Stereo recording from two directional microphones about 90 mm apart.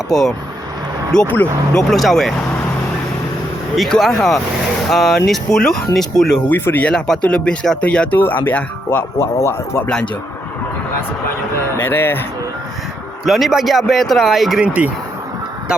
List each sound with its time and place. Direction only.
0.1 s speech: 5° left (ahead or behind)
1.7 s speech: centre (ahead or behind)
3.8 s speech: 5° left (ahead or behind)
6.5 s speech: 20° left (ahead or behind)
6.9 s speech: 10° left (ahead or behind); by 9.9 s 25° left (ahead or behind)
11.8 s speech: 25° left (ahead or behind)
13.2 s speech: 5° right (ahead or behind)
14.6 s speech: 15° right (ahead or behind)